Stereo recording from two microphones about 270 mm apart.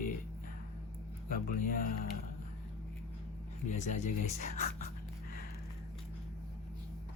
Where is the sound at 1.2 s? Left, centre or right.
Left.